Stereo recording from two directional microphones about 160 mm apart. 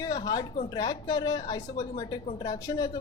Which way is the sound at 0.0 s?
25° left (ahead or behind).